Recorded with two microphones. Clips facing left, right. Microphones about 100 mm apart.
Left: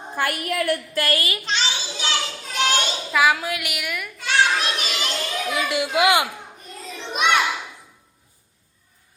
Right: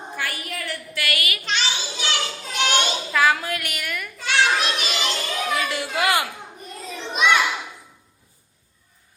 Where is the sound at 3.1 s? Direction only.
10° left (ahead or behind).